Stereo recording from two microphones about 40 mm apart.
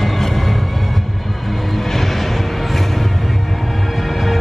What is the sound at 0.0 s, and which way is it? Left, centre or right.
Vehicle, centre.